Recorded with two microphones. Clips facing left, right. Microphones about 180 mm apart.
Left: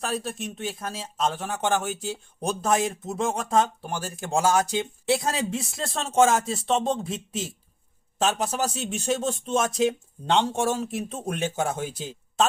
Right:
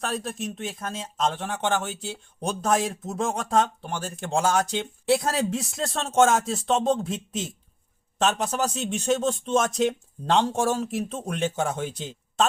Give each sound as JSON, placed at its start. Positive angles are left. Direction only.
{"t": 0.0, "sound": "speech", "side_deg": 0}